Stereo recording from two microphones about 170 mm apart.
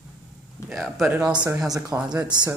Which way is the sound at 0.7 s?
Centre (ahead or behind).